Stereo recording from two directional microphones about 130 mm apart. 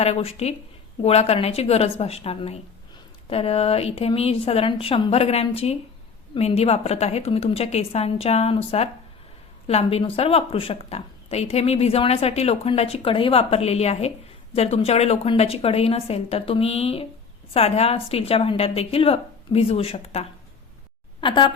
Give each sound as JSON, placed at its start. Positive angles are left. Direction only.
{"t": 0.0, "sound": "a woman's voice", "side_deg": 50}